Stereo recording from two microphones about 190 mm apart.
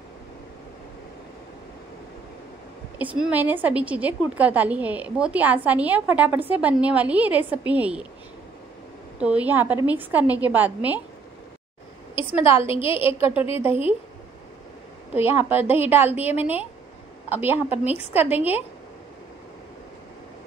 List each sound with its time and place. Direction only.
3.0 s a woman's voice: 5° right (ahead or behind)
9.2 s a woman's voice: 5° right (ahead or behind)
12.3 s a woman's voice: 10° right (ahead or behind)
13.7 s speech: 30° left (ahead or behind)
15.1 s a woman's voice: 10° right (ahead or behind)